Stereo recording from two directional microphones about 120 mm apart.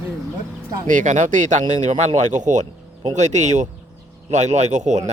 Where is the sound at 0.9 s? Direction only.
90° right.